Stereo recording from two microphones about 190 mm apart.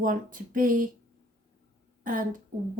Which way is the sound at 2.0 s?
45° right (ahead or behind).